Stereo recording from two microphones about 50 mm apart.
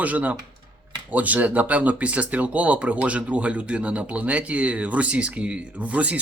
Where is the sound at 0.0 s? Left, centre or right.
Right.